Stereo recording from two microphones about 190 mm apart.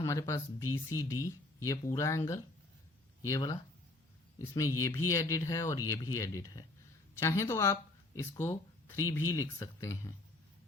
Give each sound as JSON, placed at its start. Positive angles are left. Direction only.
{"t": 0.0, "sound": "speech", "side_deg": 15}